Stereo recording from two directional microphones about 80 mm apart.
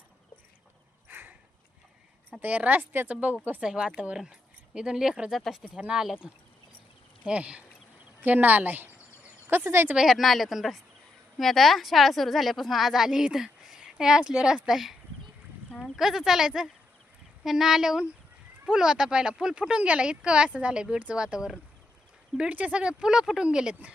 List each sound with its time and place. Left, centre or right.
1.0 s a sound: right
2.4 s a woman's voice: right
3.6 s a woman's voice: centre; by 9.9 s right
9.9 s a woman's voice: centre